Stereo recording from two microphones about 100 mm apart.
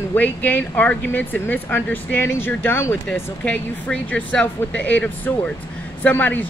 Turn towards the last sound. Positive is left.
turn(degrees=20)  # may be behind; listen again after turning